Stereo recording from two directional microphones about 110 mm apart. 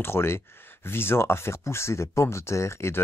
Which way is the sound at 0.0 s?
20° left (ahead or behind).